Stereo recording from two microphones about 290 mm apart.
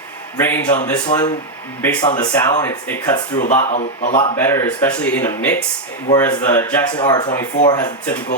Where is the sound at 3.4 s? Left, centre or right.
Left.